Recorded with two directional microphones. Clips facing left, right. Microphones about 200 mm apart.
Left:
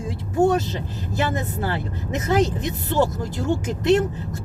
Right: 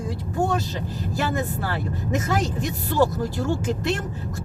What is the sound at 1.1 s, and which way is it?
Speech, 20° left (ahead or behind).